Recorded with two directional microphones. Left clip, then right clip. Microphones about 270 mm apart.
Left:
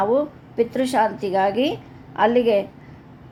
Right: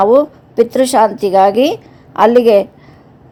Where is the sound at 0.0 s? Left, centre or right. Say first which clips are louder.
Right 10 dB; right.